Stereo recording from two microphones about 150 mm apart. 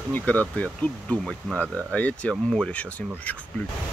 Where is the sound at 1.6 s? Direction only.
20° right (ahead or behind).